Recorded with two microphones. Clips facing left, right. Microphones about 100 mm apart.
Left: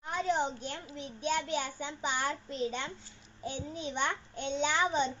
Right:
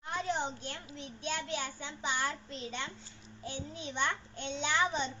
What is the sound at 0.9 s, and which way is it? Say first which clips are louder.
A child's voice: left 6 dB; 10° left (ahead or behind).